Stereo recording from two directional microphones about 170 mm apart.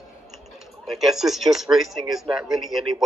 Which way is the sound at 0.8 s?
Centre (ahead or behind).